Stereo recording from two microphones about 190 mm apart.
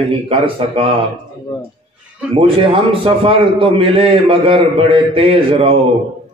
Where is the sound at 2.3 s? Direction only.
30° right (ahead or behind).